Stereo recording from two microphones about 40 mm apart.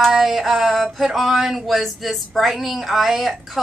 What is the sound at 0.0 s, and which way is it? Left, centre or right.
Speech, centre.